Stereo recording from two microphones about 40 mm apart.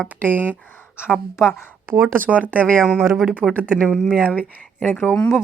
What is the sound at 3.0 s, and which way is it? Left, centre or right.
Speech, centre.